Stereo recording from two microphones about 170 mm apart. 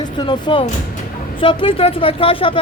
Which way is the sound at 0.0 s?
25° left (ahead or behind).